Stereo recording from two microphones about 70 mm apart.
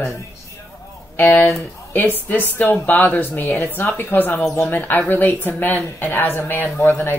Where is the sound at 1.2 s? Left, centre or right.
Left.